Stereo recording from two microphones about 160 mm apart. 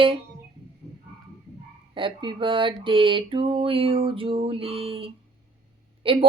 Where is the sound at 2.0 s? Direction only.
30° right (ahead or behind).